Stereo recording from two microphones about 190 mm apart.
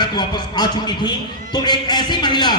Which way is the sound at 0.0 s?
20° left (ahead or behind).